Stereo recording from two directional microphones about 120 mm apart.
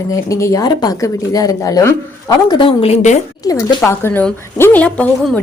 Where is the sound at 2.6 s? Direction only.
50° left (ahead or behind); by 3.2 s 70° left (ahead or behind).